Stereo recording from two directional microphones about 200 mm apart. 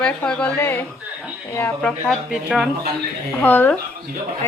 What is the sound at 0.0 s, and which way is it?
Speech, 5° left (ahead or behind).